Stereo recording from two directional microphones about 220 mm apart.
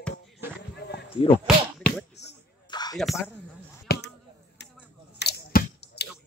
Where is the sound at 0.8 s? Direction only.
50° left (ahead or behind).